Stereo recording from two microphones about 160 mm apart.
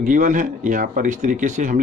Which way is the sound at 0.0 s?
55° right (ahead or behind).